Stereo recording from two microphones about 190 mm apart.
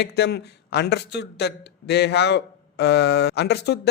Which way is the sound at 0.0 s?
60° left (ahead or behind).